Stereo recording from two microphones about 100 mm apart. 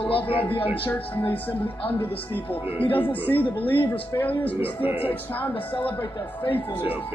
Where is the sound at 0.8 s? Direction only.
15° left (ahead or behind).